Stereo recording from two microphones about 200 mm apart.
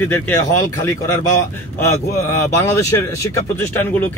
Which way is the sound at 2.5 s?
15° left (ahead or behind).